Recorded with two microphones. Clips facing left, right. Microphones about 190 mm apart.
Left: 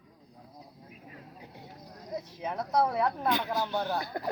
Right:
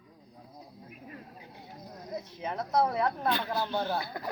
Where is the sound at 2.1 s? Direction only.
10° left (ahead or behind).